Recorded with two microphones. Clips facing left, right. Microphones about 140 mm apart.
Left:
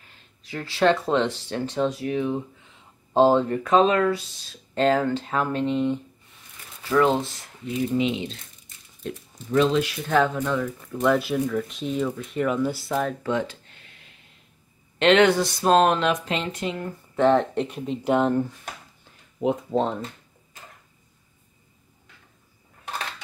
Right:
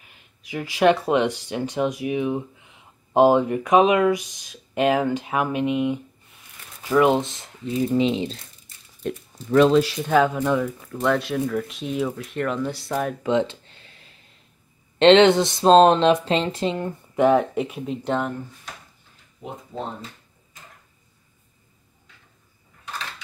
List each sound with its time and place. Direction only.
0.0 s speech: 15° right (ahead or behind); by 8.4 s 35° right (ahead or behind)
9.0 s speech: 65° right (ahead or behind)
9.7 s speech: 35° right (ahead or behind)
10.0 s speech: 10° right (ahead or behind)
13.2 s a sound: 20° right (ahead or behind)
15.0 s speech: 25° right (ahead or behind)
17.1 s speech: 10° right (ahead or behind)
19.4 s speech: 90° left